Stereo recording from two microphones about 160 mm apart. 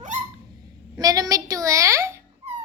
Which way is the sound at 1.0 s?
25° right (ahead or behind).